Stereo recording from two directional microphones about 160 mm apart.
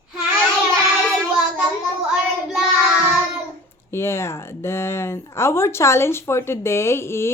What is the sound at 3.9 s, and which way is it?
Speech, 15° left (ahead or behind).